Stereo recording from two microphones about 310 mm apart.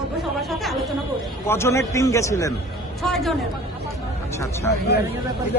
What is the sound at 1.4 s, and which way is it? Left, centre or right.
A man's voice, centre.